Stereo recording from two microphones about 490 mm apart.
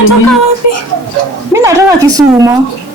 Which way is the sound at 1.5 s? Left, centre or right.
Centre.